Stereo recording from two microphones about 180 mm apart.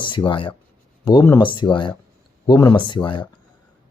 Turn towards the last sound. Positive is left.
turn(degrees=25)  # may be behind; listen again after turning